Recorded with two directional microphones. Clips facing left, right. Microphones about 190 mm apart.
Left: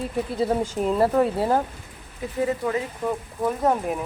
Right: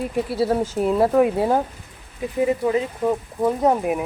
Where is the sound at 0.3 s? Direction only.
5° right (ahead or behind).